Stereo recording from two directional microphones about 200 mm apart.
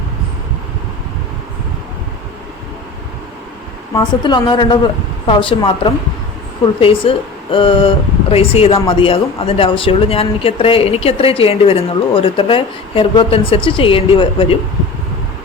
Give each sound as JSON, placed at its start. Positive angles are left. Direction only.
{"t": 3.9, "sound": "speech", "side_deg": 20}